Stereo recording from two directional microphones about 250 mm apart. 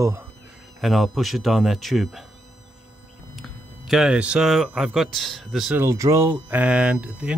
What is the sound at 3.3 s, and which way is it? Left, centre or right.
Speech, centre.